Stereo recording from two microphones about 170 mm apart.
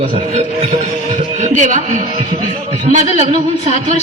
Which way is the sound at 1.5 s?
45° right (ahead or behind).